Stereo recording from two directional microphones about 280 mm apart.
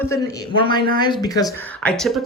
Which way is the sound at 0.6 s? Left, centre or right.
Centre.